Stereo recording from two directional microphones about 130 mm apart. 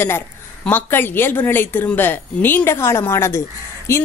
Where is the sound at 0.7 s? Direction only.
15° left (ahead or behind).